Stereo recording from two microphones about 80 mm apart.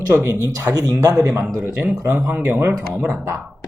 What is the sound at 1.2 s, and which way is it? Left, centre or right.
Speech, right.